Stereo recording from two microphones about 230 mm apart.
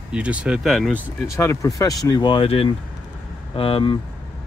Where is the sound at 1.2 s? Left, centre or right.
Centre.